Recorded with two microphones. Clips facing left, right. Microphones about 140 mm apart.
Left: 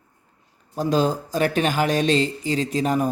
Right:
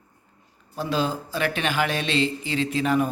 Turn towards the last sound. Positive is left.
turn(degrees=40)  # may be behind; listen again after turning